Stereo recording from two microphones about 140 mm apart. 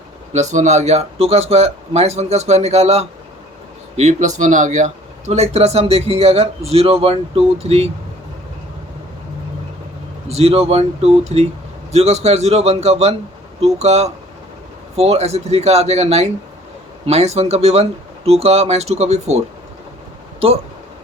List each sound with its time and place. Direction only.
0.3 s speech: 60° right (ahead or behind)
10.2 s speech: 50° right (ahead or behind)